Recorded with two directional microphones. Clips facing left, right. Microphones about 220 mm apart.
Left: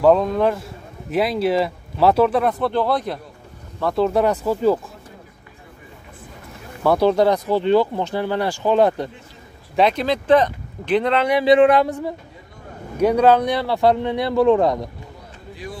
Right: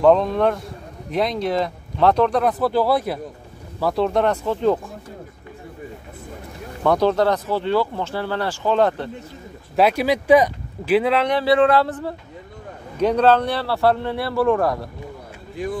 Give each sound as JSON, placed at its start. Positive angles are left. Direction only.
{"t": 0.0, "sound": "speech", "side_deg": 5}
{"t": 6.8, "sound": "speech", "side_deg": 10}
{"t": 9.8, "sound": "speech", "side_deg": -10}
{"t": 11.2, "sound": "speech", "side_deg": 15}
{"t": 15.5, "sound": "speech", "side_deg": -50}